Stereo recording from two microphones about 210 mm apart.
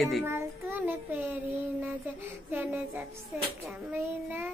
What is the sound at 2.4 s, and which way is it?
Child singing, 10° right (ahead or behind).